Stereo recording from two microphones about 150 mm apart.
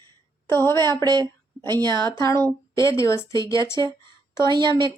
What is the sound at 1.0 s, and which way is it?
Speech, 25° right (ahead or behind).